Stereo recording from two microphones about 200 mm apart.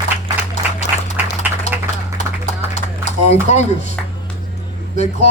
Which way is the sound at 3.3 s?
35° left (ahead or behind).